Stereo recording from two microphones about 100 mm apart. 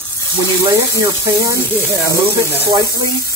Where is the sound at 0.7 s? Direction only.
30° right (ahead or behind).